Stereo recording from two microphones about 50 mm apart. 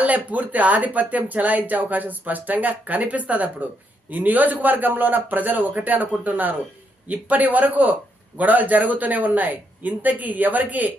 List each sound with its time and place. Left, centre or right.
0.0 s speech: right